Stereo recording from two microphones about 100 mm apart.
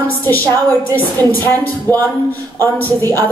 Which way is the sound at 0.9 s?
20° left (ahead or behind).